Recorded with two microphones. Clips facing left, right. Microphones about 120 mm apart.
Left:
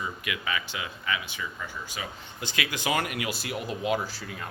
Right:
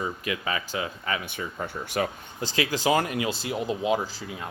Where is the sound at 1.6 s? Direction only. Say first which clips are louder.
Right 9 dB; 60° right (ahead or behind).